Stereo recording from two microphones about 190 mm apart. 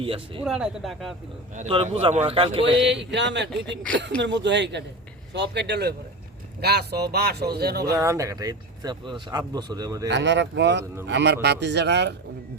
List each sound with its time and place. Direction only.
0.0 s speech: 30° right (ahead or behind)
0.4 s speech: centre (ahead or behind)
1.5 s speech: 35° right (ahead or behind)
2.7 s a sound: 70° right (ahead or behind)
5.3 s speech: 65° right (ahead or behind)
7.9 s speech: 15° right (ahead or behind)
10.1 s a sound: 70° right (ahead or behind)
11.0 s speech: 65° right (ahead or behind)